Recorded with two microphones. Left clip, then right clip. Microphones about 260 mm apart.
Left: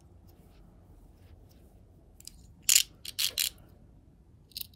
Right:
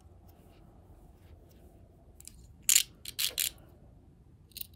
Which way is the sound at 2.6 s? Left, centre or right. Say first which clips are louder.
Left 2 dB; centre.